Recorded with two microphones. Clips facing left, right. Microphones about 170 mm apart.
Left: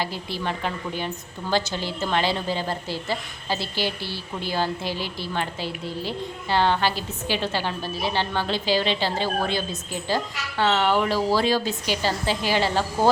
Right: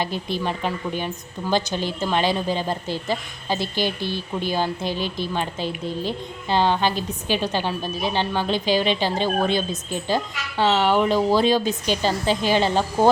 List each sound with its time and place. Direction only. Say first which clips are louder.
0.0 s a woman's voice: right 3 dB; 20° right (ahead or behind)